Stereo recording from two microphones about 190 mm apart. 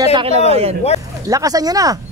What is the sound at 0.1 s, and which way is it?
Speech, 30° right (ahead or behind).